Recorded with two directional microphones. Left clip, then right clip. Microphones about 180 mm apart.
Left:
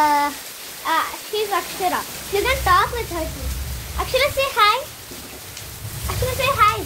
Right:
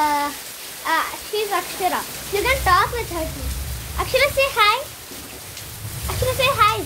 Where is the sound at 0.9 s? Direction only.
5° right (ahead or behind).